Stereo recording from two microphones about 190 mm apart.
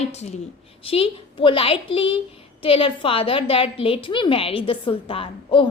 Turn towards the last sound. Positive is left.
turn(degrees=30)  # may be behind; listen again after turning